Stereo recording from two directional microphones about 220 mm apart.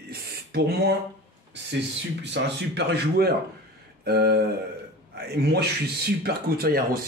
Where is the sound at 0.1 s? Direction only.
45° right (ahead or behind).